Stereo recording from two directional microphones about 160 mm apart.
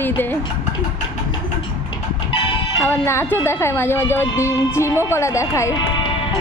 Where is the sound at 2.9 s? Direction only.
15° left (ahead or behind).